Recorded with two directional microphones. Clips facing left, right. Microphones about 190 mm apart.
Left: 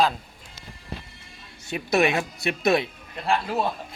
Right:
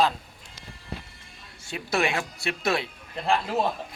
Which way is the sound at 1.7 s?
20° left (ahead or behind).